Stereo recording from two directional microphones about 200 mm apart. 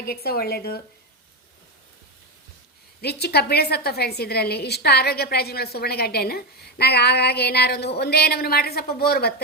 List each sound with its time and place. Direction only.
0.0 s a woman's voice: 50° left (ahead or behind)
3.0 s a woman's voice: 55° left (ahead or behind)